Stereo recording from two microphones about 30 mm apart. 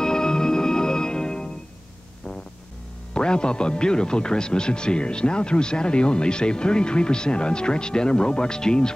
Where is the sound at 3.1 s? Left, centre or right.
Left.